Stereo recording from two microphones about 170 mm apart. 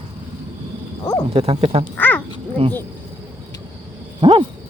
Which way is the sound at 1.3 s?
35° right (ahead or behind).